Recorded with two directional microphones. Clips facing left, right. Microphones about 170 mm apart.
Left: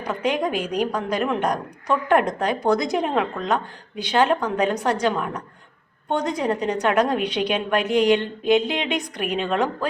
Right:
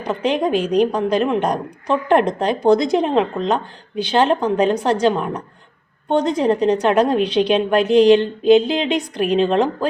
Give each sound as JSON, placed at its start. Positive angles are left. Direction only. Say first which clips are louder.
{"t": 0.0, "sound": "speech", "louder": "right 4 dB", "side_deg": -25}